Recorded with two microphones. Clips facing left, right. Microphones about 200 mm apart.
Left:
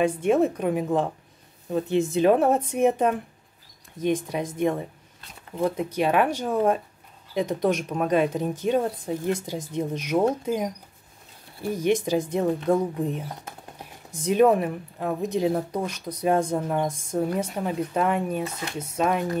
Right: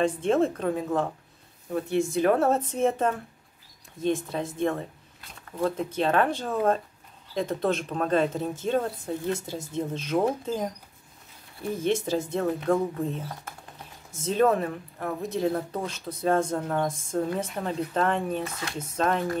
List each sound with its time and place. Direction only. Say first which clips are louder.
0.0 s speech: left 2 dB; 10° left (ahead or behind)
18.5 s speech: left 2 dB; 20° left (ahead or behind)
18.8 s speech: left 2 dB; 10° left (ahead or behind)